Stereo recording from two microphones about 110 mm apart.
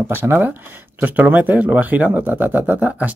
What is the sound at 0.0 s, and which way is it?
Speech, 20° right (ahead or behind).